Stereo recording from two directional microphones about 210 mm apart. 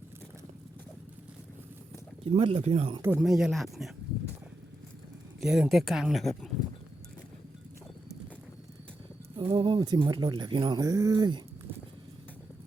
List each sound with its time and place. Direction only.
2.2 s speech: 25° right (ahead or behind)
3.0 s speech: 5° right (ahead or behind)
5.4 s speech: 5° right (ahead or behind)
9.3 s speech: 25° right (ahead or behind)